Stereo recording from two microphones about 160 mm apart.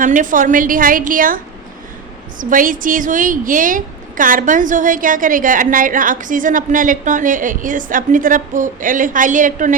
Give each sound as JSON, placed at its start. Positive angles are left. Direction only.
{"t": 0.0, "sound": "a woman's voice", "side_deg": -55}
{"t": 2.4, "sound": "a woman's voice", "side_deg": -55}